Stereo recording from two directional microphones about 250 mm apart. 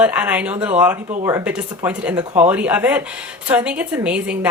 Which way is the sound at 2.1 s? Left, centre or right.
Right.